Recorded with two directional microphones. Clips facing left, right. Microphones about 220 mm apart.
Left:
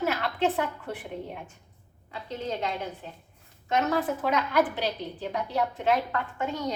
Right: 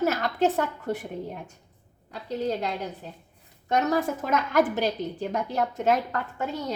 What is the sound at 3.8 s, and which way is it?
A woman's voice, 45° right (ahead or behind).